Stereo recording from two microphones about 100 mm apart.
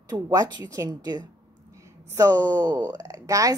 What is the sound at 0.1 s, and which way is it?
A woman's voice, 40° right (ahead or behind).